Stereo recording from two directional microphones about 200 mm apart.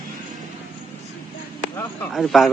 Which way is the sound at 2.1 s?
Centre (ahead or behind).